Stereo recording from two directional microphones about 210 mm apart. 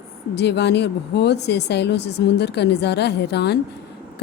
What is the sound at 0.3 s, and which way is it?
A woman's voice, 55° left (ahead or behind).